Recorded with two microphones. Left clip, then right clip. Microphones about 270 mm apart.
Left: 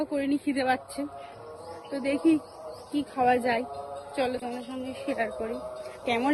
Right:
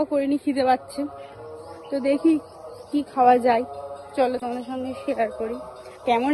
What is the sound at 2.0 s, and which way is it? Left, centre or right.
A woman's voice, centre.